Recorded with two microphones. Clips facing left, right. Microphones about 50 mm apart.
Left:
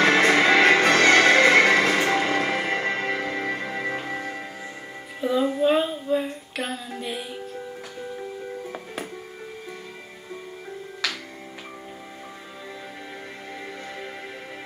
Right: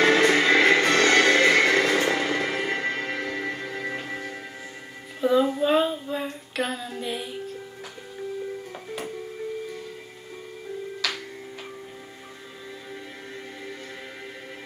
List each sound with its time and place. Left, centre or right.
0.2 s music: left
5.2 s female singing: centre